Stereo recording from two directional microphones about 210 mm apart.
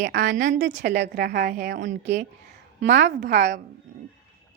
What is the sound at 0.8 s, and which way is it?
Speech, 55° right (ahead or behind).